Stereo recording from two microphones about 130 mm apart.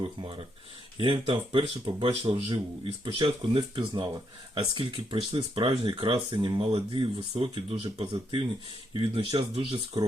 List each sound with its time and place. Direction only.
0.2 s speech: 40° right (ahead or behind)
10.0 s speech: 30° right (ahead or behind)